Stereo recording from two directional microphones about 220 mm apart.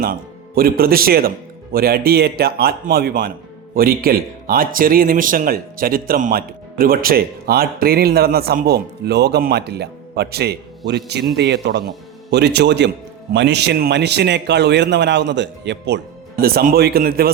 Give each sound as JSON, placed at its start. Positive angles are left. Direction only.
{"t": 0.0, "sound": "a man's voice", "side_deg": -40}